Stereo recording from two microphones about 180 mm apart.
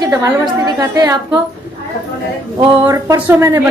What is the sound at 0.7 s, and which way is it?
Speech, 20° right (ahead or behind).